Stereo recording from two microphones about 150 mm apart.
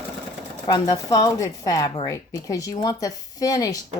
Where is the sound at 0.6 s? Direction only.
25° left (ahead or behind).